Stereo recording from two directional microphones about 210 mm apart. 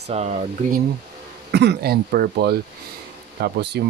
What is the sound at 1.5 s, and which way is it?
Speech, 50° right (ahead or behind).